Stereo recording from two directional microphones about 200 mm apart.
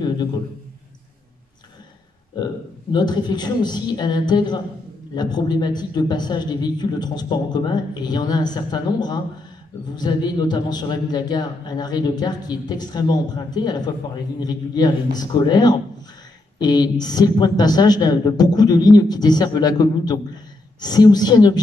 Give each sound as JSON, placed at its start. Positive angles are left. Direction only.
{"t": 2.3, "sound": "a man's voice", "side_deg": 20}